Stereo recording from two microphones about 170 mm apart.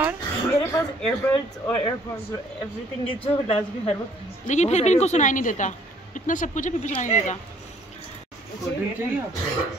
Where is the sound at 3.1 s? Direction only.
35° left (ahead or behind).